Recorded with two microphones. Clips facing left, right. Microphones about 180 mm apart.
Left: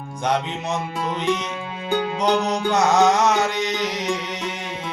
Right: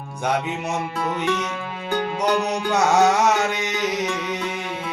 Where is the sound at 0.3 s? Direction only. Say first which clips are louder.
Even; 10° right (ahead or behind).